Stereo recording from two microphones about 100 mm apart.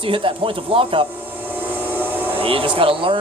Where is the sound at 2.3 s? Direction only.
65° right (ahead or behind).